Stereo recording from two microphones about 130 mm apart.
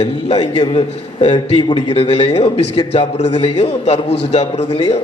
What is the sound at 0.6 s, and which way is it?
A man's voice, 40° left (ahead or behind).